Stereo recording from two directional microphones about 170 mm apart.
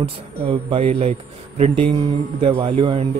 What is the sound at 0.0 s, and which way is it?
Speech, 35° right (ahead or behind).